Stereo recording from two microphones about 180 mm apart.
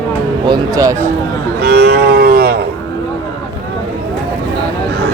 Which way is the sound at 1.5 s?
65° right (ahead or behind).